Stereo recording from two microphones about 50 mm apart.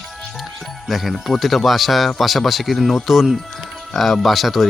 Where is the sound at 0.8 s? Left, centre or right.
Centre.